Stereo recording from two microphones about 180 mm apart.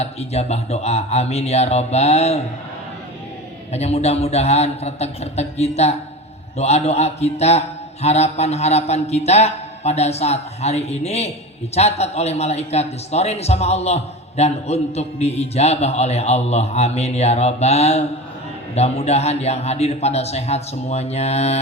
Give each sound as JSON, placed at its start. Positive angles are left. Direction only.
{"t": 0.0, "sound": "a man's voice", "side_deg": 35}
{"t": 3.7, "sound": "a man's voice", "side_deg": 35}